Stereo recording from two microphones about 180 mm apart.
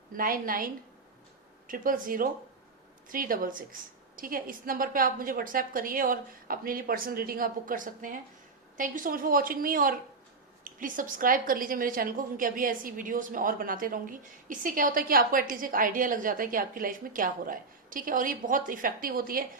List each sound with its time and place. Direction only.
0.2 s a woman's voice: 50° right (ahead or behind)